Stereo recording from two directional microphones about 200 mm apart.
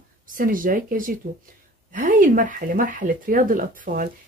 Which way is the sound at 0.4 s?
45° right (ahead or behind).